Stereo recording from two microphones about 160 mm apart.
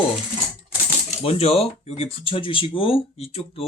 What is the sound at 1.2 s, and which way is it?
Speech, 40° left (ahead or behind).